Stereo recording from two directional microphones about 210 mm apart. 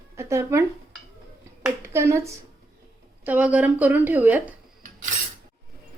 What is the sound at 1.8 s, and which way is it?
A woman's voice, 15° right (ahead or behind).